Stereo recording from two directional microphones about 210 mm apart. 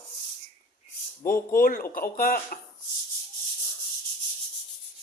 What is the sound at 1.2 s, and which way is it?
Speech, 45° left (ahead or behind).